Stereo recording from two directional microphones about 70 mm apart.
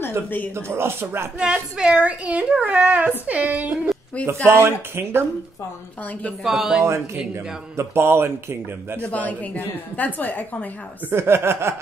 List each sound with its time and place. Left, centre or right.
0.6 s a man's voice: right
1.4 s a woman's voice: centre
4.5 s a man's voice: right
6.4 s speech: centre
7.7 s a man's voice: right
9.0 s a woman's voice: left
11.1 s a man's voice: right